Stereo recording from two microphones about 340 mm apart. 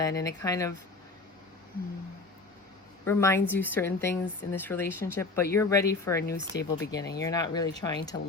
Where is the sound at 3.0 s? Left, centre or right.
Centre.